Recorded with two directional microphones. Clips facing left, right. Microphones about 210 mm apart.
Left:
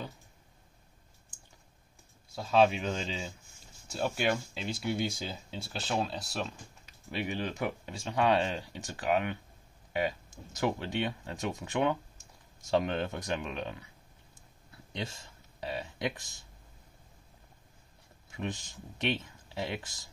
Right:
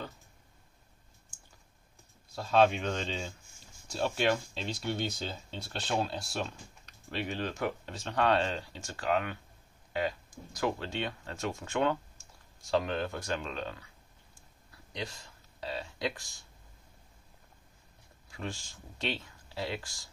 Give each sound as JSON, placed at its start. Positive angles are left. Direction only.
{"t": 2.3, "sound": "speech", "side_deg": 5}
{"t": 14.9, "sound": "speech", "side_deg": 25}
{"t": 18.3, "sound": "speech", "side_deg": 20}